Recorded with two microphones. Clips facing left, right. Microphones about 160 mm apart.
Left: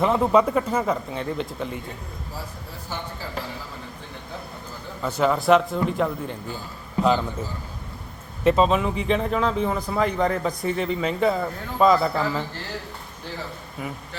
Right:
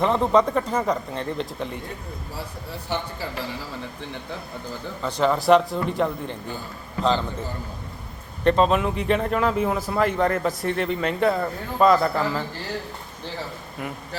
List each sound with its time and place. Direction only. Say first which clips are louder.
0.0 s a man's voice: even; 5° left (ahead or behind)
2.9 s a man's voice: right 6 dB; 70° right (ahead or behind)
5.0 s a man's voice: even; 5° left (ahead or behind)
8.4 s a man's voice: even; centre (ahead or behind)